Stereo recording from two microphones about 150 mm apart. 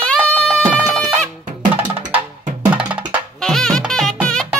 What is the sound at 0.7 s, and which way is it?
Music, 10° left (ahead or behind).